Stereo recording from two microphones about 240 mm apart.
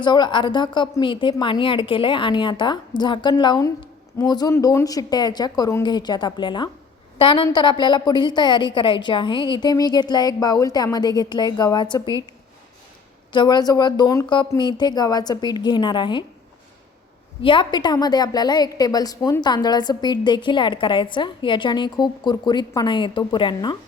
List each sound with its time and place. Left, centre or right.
0.0 s a woman's voice: centre
13.3 s a woman's voice: centre
17.4 s a woman's voice: left